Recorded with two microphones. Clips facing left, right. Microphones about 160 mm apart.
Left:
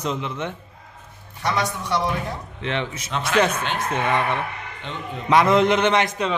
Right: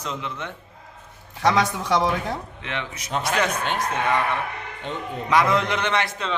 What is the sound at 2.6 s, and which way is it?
Speech, 30° left (ahead or behind).